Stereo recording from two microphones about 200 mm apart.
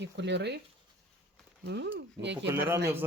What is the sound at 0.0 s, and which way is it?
Speech, 60° right (ahead or behind).